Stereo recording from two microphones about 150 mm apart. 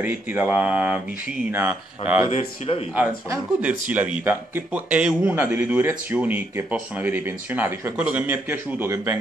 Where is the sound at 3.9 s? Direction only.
15° right (ahead or behind).